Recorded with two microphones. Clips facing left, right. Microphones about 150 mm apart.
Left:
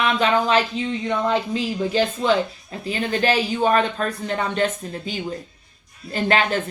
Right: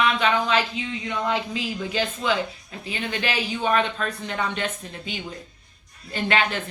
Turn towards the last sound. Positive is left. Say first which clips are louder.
# left 4 dB
turn(degrees=40)  # may be behind; listen again after turning